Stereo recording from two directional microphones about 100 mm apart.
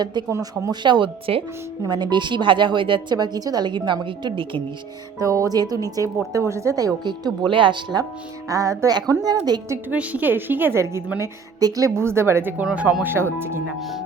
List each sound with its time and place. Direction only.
0.0 s a woman's voice: 50° right (ahead or behind)
0.3 s a woman's voice: 30° right (ahead or behind)
0.7 s a woman's voice: 50° right (ahead or behind)
5.2 s a woman's voice: 35° right (ahead or behind); by 8.0 s 50° right (ahead or behind)
8.4 s a woman's voice: 35° right (ahead or behind)
8.9 s a woman's voice: 40° right (ahead or behind)
9.9 s a woman's voice: 15° right (ahead or behind)
12.6 s a woman's voice: 10° right (ahead or behind)
13.7 s speech: centre (ahead or behind)